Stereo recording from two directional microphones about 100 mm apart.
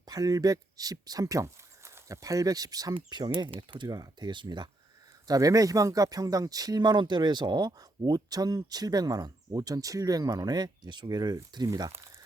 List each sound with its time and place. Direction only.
0.0 s speech: 40° right (ahead or behind)
3.8 s speech: 40° right (ahead or behind)
5.3 s speech: 35° right (ahead or behind)